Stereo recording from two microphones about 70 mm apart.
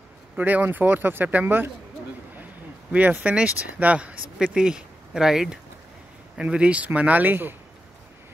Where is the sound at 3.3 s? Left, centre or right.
Centre.